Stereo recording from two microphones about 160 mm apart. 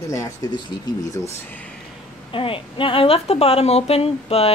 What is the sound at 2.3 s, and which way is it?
Speech, 35° left (ahead or behind).